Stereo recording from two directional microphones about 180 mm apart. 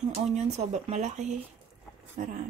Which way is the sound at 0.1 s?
35° right (ahead or behind).